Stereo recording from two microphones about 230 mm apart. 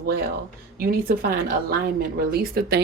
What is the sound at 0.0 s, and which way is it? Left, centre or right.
Speech, right.